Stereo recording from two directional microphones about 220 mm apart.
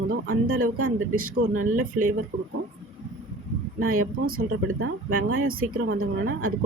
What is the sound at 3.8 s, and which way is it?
Speech, 80° right.